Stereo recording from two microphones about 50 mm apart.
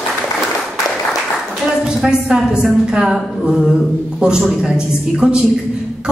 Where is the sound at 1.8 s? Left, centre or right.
Centre.